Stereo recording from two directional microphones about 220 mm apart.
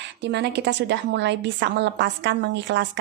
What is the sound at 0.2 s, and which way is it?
A woman's voice, 50° right (ahead or behind).